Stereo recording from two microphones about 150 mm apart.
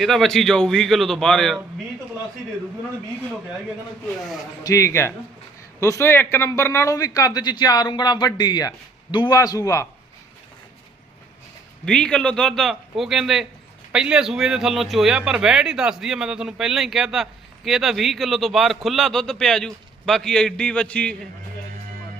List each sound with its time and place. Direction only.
0.0 s speech: centre (ahead or behind)
4.6 s a man's voice: 20° left (ahead or behind)
11.9 s speech: 5° left (ahead or behind)